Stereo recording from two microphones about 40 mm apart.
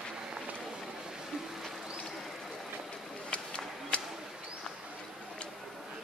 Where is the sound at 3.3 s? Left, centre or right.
Left.